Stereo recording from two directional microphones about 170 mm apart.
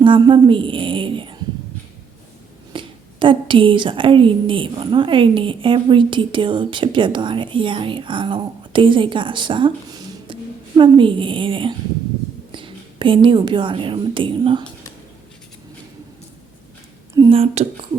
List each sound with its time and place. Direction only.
0.0 s a sound: 30° right (ahead or behind)
2.7 s a woman's voice: 30° right (ahead or behind)
17.2 s a woman's voice: 30° right (ahead or behind)